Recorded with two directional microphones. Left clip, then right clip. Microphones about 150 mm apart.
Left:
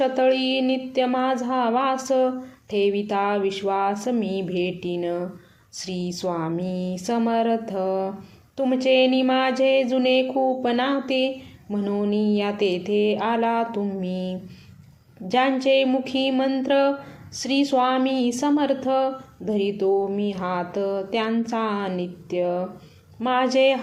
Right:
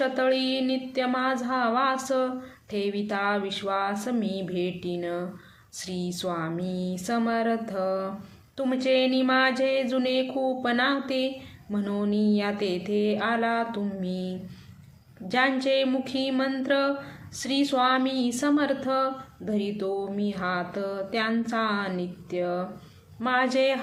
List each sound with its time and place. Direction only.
0.0 s a woman's voice: 10° left (ahead or behind)
15.3 s a woman's voice: 10° left (ahead or behind)